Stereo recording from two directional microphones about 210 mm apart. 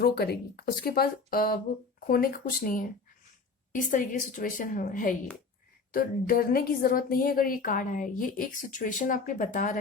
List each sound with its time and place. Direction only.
0.0 s a woman's voice: 50° left (ahead or behind)